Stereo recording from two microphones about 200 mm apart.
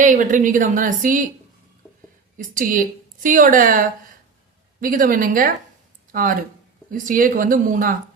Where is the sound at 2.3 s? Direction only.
45° right (ahead or behind).